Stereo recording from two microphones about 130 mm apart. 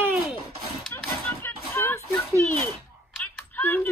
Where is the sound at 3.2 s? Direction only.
15° left (ahead or behind).